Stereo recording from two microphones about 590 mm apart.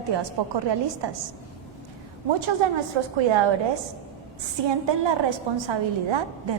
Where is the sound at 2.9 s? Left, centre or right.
Right.